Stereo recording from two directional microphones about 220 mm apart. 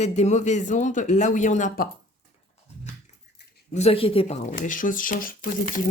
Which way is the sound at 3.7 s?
25° left (ahead or behind).